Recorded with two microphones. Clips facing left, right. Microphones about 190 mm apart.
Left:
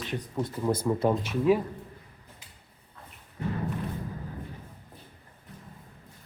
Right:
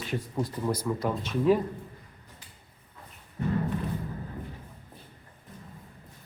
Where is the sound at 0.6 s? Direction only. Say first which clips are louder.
Left 6 dB; 25° left (ahead or behind).